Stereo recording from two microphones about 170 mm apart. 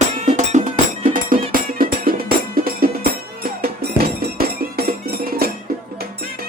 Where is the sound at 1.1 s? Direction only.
55° right (ahead or behind).